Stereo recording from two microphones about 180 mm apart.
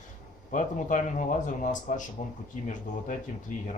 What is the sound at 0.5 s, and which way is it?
A man's voice, 45° left (ahead or behind).